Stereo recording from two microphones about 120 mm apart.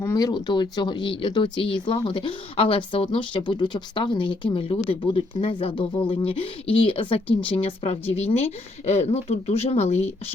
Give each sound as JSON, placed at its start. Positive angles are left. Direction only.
{"t": 0.0, "sound": "speech", "side_deg": 25}